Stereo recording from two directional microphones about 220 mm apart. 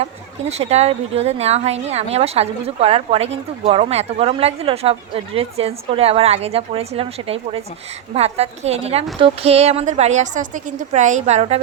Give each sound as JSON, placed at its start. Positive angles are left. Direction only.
{"t": 0.0, "sound": "a woman's voice", "side_deg": -30}